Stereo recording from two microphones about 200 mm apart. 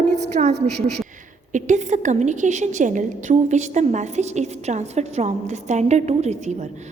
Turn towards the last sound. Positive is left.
turn(degrees=-35)  # may be behind; listen again after turning